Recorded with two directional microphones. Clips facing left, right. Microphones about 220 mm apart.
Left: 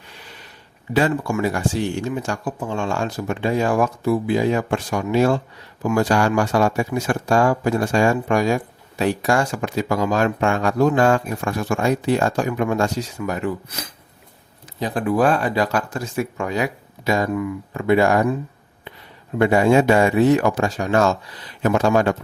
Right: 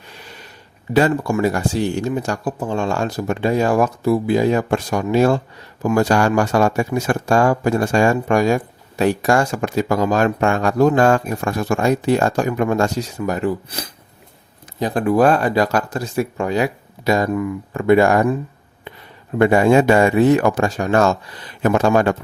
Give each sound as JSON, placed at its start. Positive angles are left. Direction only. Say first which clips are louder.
{"t": 0.9, "sound": "speech", "louder": "right 3 dB", "side_deg": -40}
{"t": 14.8, "sound": "speech", "louder": "right 4 dB", "side_deg": -45}
{"t": 19.4, "sound": "speech", "louder": "right 2 dB", "side_deg": -55}